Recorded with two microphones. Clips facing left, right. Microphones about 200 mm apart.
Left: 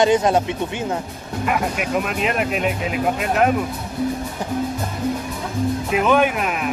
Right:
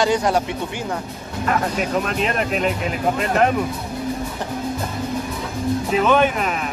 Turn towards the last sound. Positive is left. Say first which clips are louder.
# even
turn(degrees=5)  # may be behind; listen again after turning